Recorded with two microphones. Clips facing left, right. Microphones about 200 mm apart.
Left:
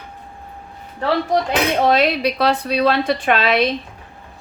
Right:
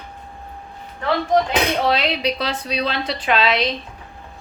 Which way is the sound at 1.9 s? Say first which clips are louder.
Left 4 dB; 50° left (ahead or behind).